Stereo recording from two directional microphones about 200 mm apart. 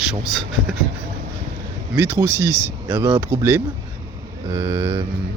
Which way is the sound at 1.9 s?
10° right (ahead or behind).